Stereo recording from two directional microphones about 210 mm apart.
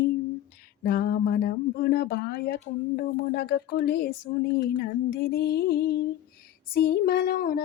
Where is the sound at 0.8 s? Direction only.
45° left (ahead or behind).